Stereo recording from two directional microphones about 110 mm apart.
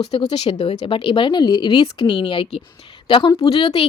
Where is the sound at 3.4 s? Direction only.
60° left (ahead or behind).